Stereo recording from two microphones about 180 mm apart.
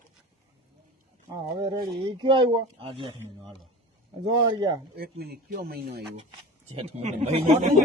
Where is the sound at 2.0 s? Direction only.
30° right (ahead or behind).